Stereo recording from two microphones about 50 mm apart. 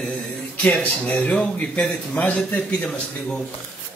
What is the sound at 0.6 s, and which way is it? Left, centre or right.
A man's voice, left.